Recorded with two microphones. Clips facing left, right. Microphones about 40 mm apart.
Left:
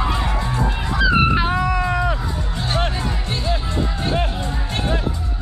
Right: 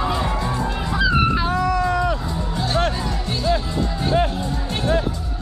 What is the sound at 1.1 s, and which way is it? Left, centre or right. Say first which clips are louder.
Music: left 3 dB; left.